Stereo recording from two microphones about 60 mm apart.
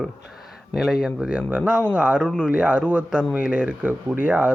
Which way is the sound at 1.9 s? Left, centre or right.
Right.